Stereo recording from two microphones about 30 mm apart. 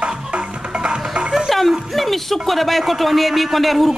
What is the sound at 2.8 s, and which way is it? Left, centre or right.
Speech, centre.